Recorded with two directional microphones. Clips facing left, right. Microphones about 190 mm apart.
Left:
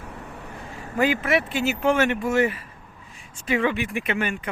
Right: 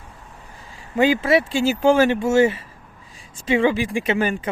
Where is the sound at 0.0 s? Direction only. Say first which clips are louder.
Left 6 dB; 70° left (ahead or behind).